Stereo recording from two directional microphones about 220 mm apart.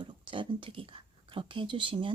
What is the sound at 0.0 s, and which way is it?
Speech, 20° right (ahead or behind).